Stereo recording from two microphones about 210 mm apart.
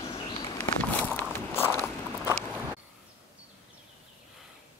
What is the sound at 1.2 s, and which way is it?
Walk, 10° left (ahead or behind).